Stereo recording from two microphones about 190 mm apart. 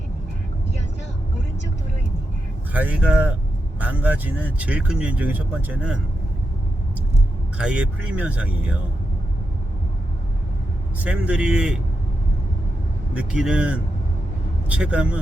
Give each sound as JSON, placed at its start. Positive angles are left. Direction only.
{"t": 2.7, "sound": "speech", "side_deg": -5}
{"t": 7.6, "sound": "speech", "side_deg": -5}
{"t": 11.0, "sound": "speech", "side_deg": -5}
{"t": 13.1, "sound": "speech", "side_deg": -5}